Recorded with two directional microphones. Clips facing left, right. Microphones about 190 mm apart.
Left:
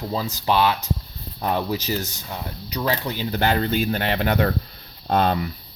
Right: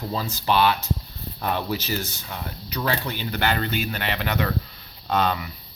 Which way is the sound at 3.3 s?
30° left (ahead or behind).